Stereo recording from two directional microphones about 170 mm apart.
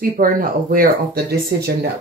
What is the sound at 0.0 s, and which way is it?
Speech, 55° right (ahead or behind).